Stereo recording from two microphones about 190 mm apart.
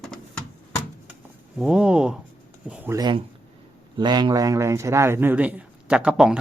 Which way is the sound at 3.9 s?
25° right (ahead or behind).